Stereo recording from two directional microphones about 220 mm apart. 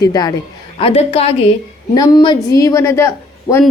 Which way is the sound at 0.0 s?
15° left (ahead or behind).